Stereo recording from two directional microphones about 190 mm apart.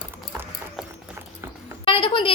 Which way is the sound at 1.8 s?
25° left (ahead or behind).